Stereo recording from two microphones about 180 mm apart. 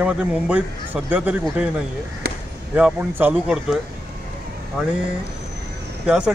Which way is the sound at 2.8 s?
10° right (ahead or behind).